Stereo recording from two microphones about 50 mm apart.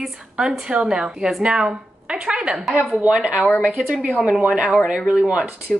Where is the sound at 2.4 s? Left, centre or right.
Centre.